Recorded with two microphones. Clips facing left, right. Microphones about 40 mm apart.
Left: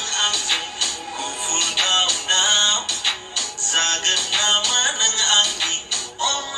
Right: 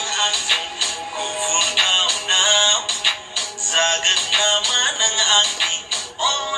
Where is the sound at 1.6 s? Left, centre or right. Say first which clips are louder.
Right 1 dB; right.